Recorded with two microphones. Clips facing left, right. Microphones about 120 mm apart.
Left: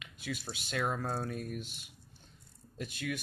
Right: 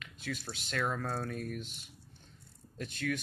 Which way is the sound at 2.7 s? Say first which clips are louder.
Right 2 dB; 10° left (ahead or behind).